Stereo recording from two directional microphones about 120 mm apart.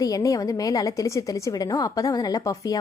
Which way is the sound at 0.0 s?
30° left (ahead or behind).